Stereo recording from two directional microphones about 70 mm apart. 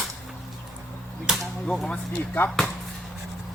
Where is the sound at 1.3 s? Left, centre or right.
Centre.